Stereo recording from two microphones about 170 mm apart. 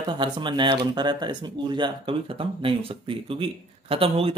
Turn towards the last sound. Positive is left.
turn(degrees=-35)  # may be behind; listen again after turning